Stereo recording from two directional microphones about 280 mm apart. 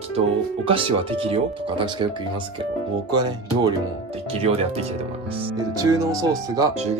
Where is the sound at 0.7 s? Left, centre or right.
Centre.